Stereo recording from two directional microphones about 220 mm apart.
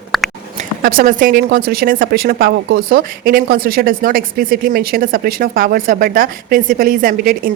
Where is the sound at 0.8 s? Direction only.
40° right (ahead or behind).